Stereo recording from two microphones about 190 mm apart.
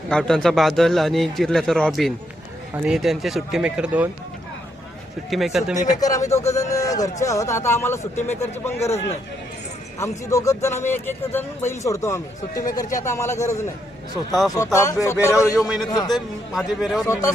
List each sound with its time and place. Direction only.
0.1 s a man's voice: 5° left (ahead or behind)
5.3 s a man's voice: centre (ahead or behind)
6.0 s speech: 20° left (ahead or behind)
10.0 s speech: 15° left (ahead or behind)
15.5 s a man's voice: centre (ahead or behind)
15.9 s a man's voice: 20° left (ahead or behind)
16.1 s a man's voice: centre (ahead or behind)
17.1 s speech: 15° left (ahead or behind)